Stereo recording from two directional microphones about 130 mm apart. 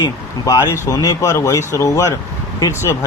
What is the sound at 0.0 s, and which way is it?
Speech, 30° left (ahead or behind).